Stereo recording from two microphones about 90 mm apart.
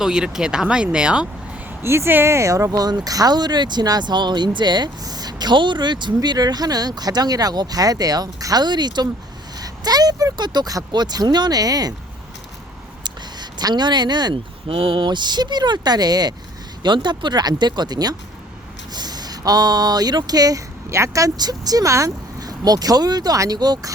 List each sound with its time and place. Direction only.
0.0 s speech: 5° right (ahead or behind)
1.8 s speech: 30° right (ahead or behind); by 11.9 s 45° right (ahead or behind)
13.1 s a sound: 50° right (ahead or behind)
14.7 s speech: 80° right; by 23.9 s 50° right (ahead or behind)